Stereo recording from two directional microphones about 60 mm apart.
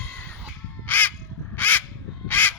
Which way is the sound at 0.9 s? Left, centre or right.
Left.